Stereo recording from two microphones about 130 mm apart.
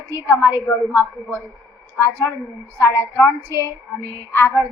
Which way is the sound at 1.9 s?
20° left (ahead or behind).